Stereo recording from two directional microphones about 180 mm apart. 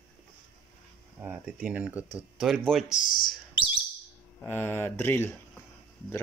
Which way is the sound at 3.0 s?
50° left (ahead or behind).